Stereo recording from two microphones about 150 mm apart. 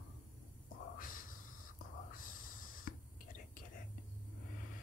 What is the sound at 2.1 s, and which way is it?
Whispering, 65° left (ahead or behind).